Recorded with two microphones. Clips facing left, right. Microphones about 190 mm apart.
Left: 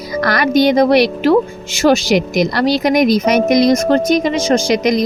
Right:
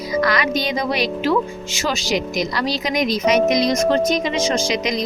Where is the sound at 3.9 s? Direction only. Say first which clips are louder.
Left 5 dB; 50° left (ahead or behind).